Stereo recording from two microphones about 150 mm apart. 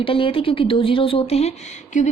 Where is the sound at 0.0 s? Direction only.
35° left (ahead or behind).